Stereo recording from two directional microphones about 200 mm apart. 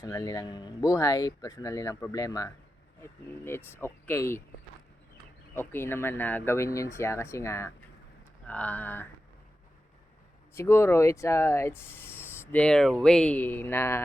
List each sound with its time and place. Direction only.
0.0 s speech: 15° left (ahead or behind)
5.5 s speech: 10° left (ahead or behind)
10.5 s speech: 10° left (ahead or behind)